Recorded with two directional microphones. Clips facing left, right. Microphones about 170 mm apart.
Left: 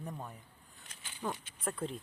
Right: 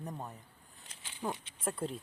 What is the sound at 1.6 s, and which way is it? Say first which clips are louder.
Speech: right 1 dB; 10° right (ahead or behind).